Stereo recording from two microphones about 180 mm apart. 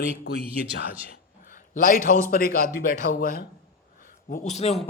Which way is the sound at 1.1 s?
50° left (ahead or behind).